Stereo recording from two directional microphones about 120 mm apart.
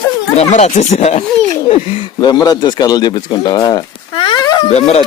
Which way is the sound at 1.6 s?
50° left (ahead or behind).